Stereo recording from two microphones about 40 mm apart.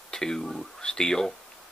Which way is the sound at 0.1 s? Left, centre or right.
Centre.